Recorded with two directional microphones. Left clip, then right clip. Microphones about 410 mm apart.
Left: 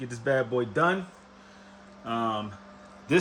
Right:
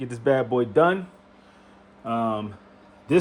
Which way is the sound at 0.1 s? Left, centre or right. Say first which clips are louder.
Right 4 dB; centre.